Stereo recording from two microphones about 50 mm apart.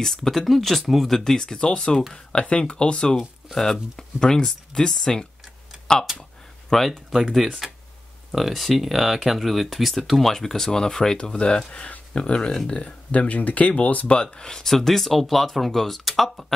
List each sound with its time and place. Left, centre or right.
0.0 s speech: centre
6.7 s speech: centre
12.7 s speech: left; by 16.5 s centre